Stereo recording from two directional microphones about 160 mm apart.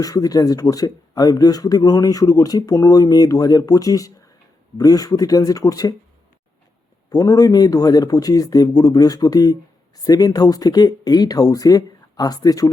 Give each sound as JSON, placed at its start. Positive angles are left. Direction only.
{"t": 0.0, "sound": "speech", "side_deg": 20}
{"t": 7.1, "sound": "speech", "side_deg": 20}